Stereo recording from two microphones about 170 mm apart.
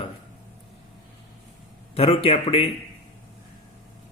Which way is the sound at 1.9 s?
35° left (ahead or behind).